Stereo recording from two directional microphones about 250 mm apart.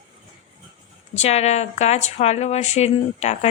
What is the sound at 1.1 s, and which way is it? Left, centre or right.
Speech, left.